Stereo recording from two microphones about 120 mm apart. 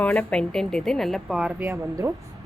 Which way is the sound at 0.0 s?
10° left (ahead or behind).